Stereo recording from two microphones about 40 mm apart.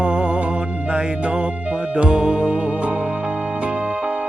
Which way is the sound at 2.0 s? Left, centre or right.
Right.